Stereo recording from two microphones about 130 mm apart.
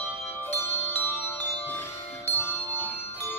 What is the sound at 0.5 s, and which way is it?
Music, 20° left (ahead or behind).